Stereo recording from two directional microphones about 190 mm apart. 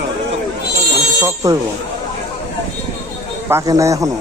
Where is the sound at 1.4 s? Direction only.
20° right (ahead or behind).